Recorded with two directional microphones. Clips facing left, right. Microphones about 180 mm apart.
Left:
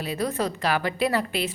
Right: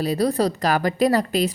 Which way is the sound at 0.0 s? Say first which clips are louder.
Right 6 dB; 35° right (ahead or behind).